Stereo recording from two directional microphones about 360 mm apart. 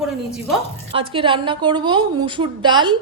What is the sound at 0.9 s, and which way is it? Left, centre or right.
A woman's voice, centre.